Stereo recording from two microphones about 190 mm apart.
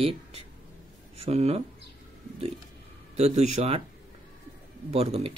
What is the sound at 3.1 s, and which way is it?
Speech, 35° right (ahead or behind).